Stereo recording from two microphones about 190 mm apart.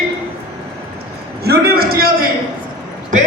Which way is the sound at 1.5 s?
55° right (ahead or behind).